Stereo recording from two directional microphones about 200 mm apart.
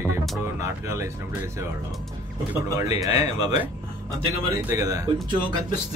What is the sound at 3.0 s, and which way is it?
Speech, 20° right (ahead or behind).